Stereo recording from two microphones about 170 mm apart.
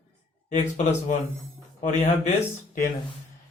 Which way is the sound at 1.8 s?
45° left (ahead or behind).